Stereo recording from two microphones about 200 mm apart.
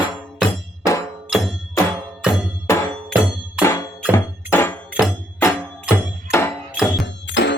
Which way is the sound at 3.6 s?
15° left (ahead or behind).